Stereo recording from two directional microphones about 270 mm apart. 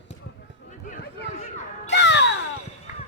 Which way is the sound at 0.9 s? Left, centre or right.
Left.